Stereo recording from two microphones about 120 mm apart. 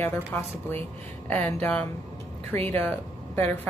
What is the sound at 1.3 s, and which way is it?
A woman's voice, 10° left (ahead or behind).